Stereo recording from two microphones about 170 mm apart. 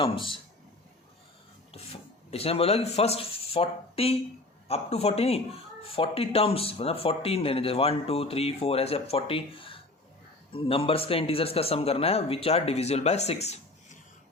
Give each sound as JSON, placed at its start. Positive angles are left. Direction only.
{"t": 0.0, "sound": "a man's voice", "side_deg": 30}
{"t": 1.7, "sound": "speech", "side_deg": 35}